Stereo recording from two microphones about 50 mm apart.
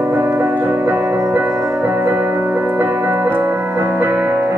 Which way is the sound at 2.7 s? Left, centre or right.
Right.